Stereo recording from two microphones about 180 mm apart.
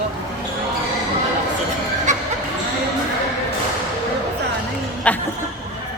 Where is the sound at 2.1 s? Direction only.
45° right (ahead or behind).